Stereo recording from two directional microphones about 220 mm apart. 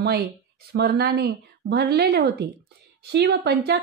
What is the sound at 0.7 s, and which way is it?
A woman's voice, 45° right (ahead or behind).